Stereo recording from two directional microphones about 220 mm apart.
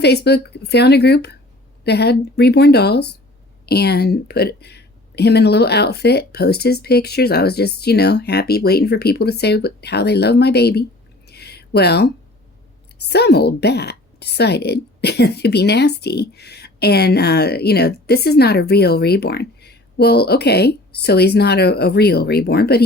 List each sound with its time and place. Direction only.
0.0 s a woman's voice: 50° left (ahead or behind)
11.3 s a sound: 45° left (ahead or behind)
13.0 s a woman's voice: 50° left (ahead or behind)